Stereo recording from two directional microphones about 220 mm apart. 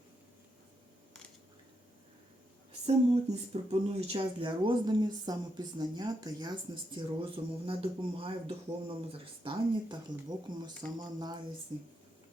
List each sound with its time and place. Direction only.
2.8 s speech: 30° right (ahead or behind)